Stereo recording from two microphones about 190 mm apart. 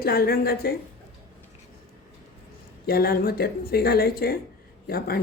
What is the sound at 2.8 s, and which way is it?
Speech, 55° left (ahead or behind).